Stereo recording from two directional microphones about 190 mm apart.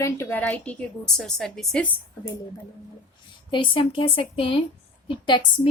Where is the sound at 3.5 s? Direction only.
25° left (ahead or behind).